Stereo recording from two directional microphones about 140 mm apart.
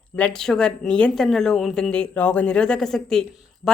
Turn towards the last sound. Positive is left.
turn(degrees=5)  # may be behind; listen again after turning